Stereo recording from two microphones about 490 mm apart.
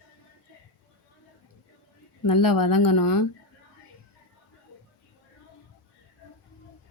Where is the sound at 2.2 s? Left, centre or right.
Left.